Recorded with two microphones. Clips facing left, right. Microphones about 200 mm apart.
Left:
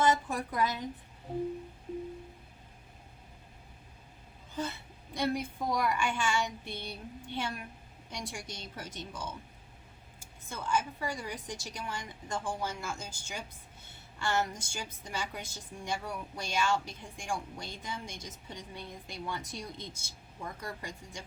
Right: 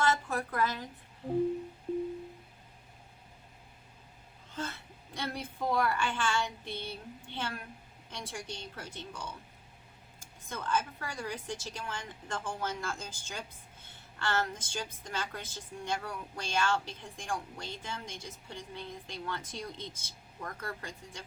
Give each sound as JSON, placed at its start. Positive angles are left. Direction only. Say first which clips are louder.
{"t": 0.0, "sound": "a woman's voice", "louder": "left 2 dB", "side_deg": 15}
{"t": 5.1, "sound": "a woman's voice", "louder": "left 6 dB", "side_deg": 15}
{"t": 10.5, "sound": "a woman's voice", "louder": "left 1 dB", "side_deg": 10}